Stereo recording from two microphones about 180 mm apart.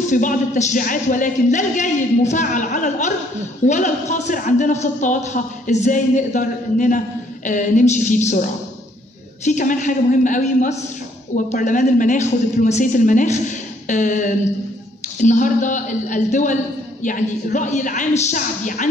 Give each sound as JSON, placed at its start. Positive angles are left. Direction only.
{"t": 0.0, "sound": "a man's voice", "side_deg": 45}